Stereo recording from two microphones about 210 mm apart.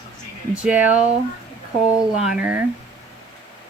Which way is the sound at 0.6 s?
5° right (ahead or behind).